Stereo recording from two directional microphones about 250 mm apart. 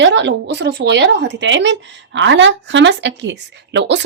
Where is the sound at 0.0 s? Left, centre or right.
Right.